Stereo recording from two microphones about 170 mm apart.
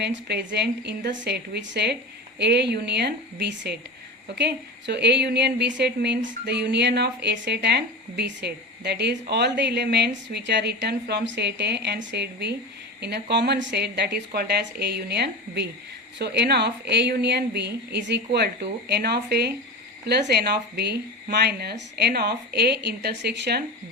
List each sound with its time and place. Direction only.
0.0 s a woman's voice: 80° right